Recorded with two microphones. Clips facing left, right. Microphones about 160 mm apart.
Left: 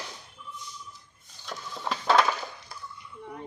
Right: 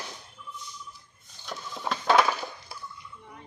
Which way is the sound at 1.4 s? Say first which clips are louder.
Right 1 dB; centre (ahead or behind).